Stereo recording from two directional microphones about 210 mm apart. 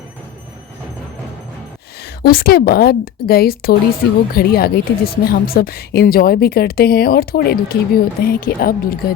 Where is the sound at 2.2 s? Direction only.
45° left (ahead or behind).